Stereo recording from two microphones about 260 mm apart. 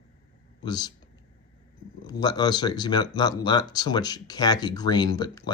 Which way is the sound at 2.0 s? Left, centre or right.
Centre.